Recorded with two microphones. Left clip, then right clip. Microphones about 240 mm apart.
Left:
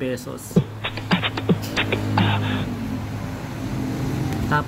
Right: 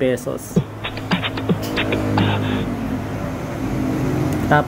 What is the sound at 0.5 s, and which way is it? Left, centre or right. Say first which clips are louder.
Music: right 1 dB; centre.